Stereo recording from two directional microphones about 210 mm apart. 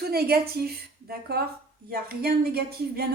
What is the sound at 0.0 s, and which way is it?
Speech, 50° right (ahead or behind).